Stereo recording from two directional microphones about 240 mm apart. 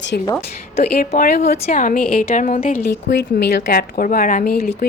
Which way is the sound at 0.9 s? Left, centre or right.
Left.